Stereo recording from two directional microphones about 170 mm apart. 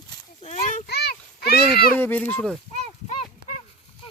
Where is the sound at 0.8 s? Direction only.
70° left (ahead or behind).